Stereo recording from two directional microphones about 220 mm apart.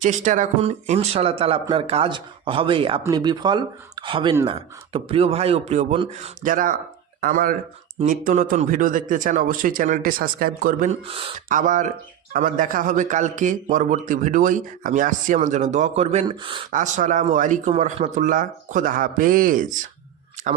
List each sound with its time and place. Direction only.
0.0 s speech: 35° right (ahead or behind)
11.4 s speech: 35° right (ahead or behind)
16.7 s speech: 35° right (ahead or behind)